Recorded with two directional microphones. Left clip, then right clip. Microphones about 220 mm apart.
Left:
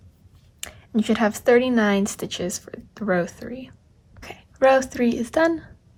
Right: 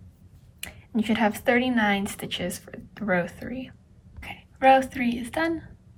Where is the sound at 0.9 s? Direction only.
20° left (ahead or behind).